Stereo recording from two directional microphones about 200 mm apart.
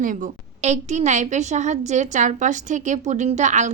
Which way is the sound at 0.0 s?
40° right (ahead or behind).